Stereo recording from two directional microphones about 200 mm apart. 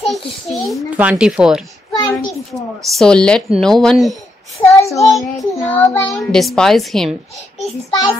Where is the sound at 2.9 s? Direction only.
5° left (ahead or behind).